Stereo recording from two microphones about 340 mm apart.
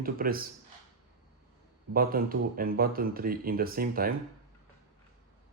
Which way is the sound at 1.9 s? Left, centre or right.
Right.